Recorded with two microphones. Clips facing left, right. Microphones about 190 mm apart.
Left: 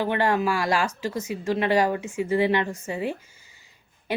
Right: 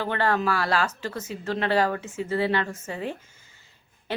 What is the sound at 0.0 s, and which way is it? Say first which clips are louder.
Speech: left 2 dB; 15° left (ahead or behind).